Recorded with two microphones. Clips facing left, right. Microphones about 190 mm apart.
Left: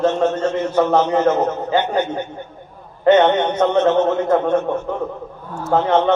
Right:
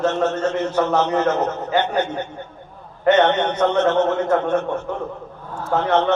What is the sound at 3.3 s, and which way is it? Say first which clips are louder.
A man's voice: left 2 dB; 10° left (ahead or behind).